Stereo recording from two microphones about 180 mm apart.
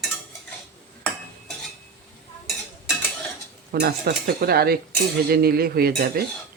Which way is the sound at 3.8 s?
65° right (ahead or behind).